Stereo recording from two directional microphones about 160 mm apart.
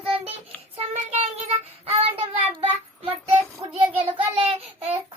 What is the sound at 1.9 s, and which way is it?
Speech, 40° right (ahead or behind).